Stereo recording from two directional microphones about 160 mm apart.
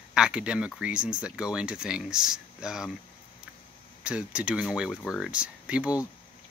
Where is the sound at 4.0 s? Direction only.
5° right (ahead or behind).